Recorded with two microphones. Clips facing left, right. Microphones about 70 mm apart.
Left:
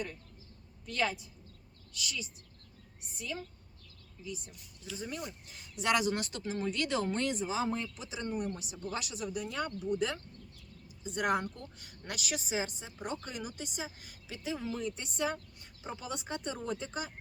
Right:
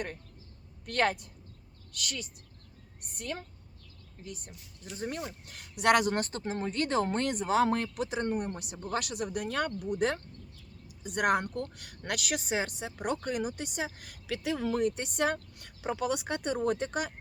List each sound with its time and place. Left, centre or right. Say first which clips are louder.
0.9 s speech: right 5 dB; right
11.0 s speech: right 4 dB; right